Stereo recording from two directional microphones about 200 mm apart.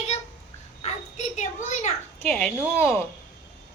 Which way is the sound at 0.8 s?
35° left (ahead or behind).